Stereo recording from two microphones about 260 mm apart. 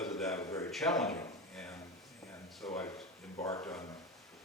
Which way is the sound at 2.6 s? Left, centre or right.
Centre.